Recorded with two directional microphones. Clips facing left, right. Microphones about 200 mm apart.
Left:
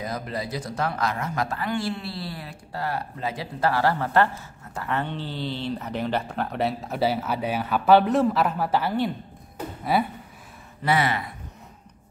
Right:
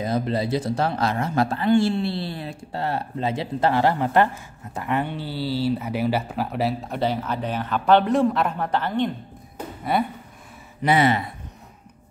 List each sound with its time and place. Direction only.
0.0 s speech: 25° right (ahead or behind); by 10.0 s centre (ahead or behind)
10.8 s speech: 20° right (ahead or behind)